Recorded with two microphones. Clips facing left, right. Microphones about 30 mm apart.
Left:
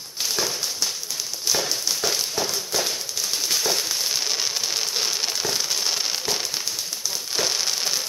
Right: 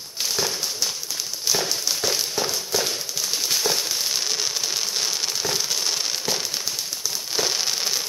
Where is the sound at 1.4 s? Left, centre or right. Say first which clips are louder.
Even; centre.